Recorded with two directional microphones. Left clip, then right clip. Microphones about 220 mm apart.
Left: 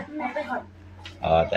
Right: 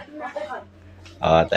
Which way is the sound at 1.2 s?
25° right (ahead or behind).